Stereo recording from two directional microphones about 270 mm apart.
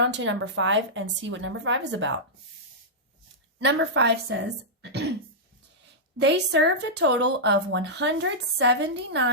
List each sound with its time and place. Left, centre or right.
0.0 s a woman's voice: right
3.6 s speech: right
6.1 s speech: right